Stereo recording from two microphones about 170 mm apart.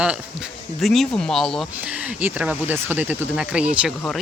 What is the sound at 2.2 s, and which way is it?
Speech, 10° right (ahead or behind).